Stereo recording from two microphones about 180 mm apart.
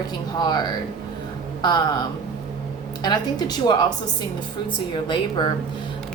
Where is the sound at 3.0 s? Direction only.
20° left (ahead or behind).